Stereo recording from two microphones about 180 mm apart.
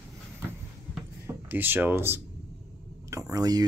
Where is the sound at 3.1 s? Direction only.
15° right (ahead or behind).